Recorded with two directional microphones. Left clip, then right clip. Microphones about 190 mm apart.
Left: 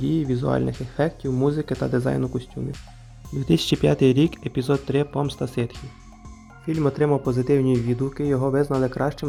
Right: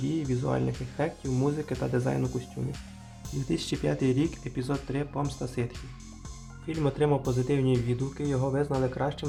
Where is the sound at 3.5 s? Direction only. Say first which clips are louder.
Left 10 dB; 40° left (ahead or behind).